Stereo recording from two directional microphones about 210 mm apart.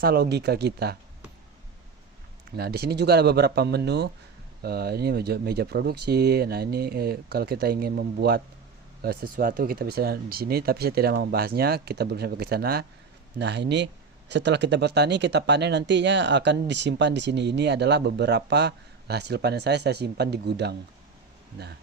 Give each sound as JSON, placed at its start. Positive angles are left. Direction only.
{"t": 0.0, "sound": "speech", "side_deg": -45}
{"t": 2.6, "sound": "speech", "side_deg": -50}